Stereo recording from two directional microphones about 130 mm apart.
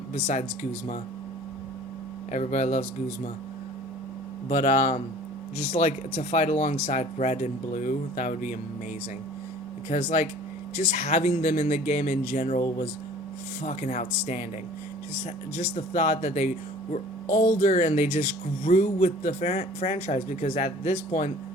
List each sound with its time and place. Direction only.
0.1 s speech: 60° left (ahead or behind)
2.3 s speech: 65° left (ahead or behind)
4.4 s speech: 75° left (ahead or behind)
5.5 s speech: 60° left (ahead or behind); by 8.4 s 80° left
9.9 s speech: 65° left (ahead or behind)
15.5 s speech: 60° left (ahead or behind)
17.6 s speech: 65° left (ahead or behind)
18.6 s speech: 90° left; by 21.3 s 70° left (ahead or behind)